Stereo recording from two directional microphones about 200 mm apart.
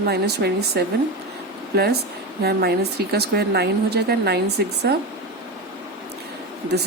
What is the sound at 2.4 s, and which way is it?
Speech, 50° right (ahead or behind).